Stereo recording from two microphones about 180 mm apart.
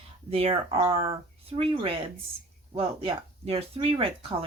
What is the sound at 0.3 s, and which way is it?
Speech, 30° right (ahead or behind).